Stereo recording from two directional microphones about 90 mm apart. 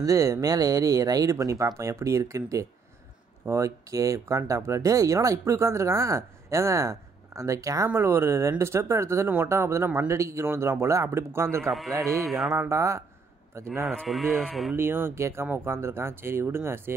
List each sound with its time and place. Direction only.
0.0 s speech: 40° right (ahead or behind)
7.9 s speech: 25° right (ahead or behind)
12.1 s speech: centre (ahead or behind)
12.5 s speech: 30° right (ahead or behind)
14.0 s speech: centre (ahead or behind)
14.8 s speech: 25° right (ahead or behind)